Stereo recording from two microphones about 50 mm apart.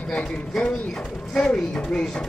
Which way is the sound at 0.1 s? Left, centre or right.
Left.